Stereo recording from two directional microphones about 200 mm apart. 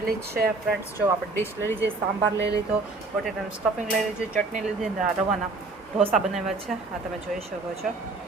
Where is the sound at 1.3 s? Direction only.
10° left (ahead or behind).